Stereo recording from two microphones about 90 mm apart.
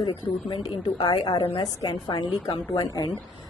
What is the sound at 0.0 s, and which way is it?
A woman's voice, 50° left (ahead or behind).